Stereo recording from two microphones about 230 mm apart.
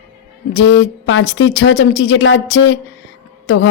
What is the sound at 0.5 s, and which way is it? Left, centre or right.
A woman's voice, left.